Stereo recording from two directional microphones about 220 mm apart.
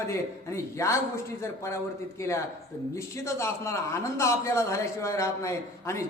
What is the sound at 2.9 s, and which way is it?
A man's voice, 15° left (ahead or behind).